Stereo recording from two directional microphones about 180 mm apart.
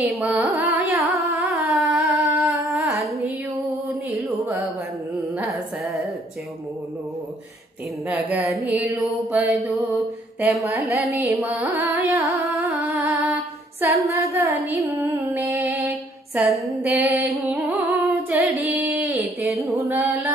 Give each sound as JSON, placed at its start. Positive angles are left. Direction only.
{"t": 0.1, "sound": "carnatic music", "side_deg": -10}
{"t": 4.1, "sound": "music", "side_deg": -10}
{"t": 5.4, "sound": "carnatic music", "side_deg": 0}
{"t": 8.1, "sound": "mantra", "side_deg": -10}
{"t": 10.6, "sound": "mantra", "side_deg": -15}
{"t": 12.6, "sound": "music", "side_deg": -10}
{"t": 14.0, "sound": "mantra", "side_deg": -15}
{"t": 15.0, "sound": "music", "side_deg": -10}
{"t": 16.3, "sound": "mantra", "side_deg": -5}
{"t": 17.5, "sound": "singing", "side_deg": -10}
{"t": 19.8, "sound": "mantra", "side_deg": -15}